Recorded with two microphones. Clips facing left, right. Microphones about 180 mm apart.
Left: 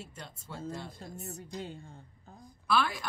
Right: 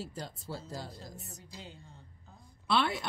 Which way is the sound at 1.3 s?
50° left (ahead or behind).